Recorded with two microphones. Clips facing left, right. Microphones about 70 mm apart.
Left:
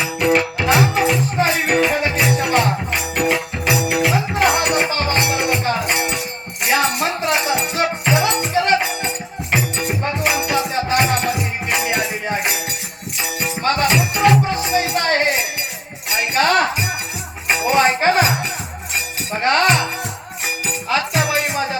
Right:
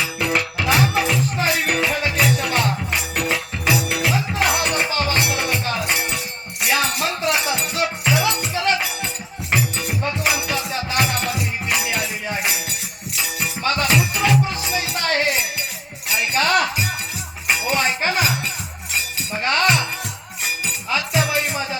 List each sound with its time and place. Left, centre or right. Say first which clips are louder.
0.6 s music: even; left
3.2 s music: left 5 dB; left
3.7 s music: left 3 dB; left
11.3 s music: left 2 dB; left
17.5 s a sound: left 5 dB; left
19.4 s music: left 5 dB; left
19.6 s music: left 2 dB; left
20.7 s music: left 5 dB; left
21.2 s music: left 2 dB; left